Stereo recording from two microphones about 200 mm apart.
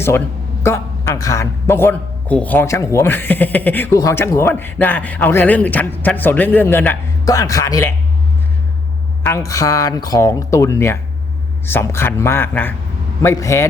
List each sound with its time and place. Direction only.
0.6 s a man's voice: 15° left (ahead or behind)
9.2 s a man's voice: 15° left (ahead or behind)